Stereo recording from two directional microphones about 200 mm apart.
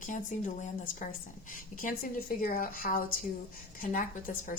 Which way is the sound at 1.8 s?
45° left (ahead or behind).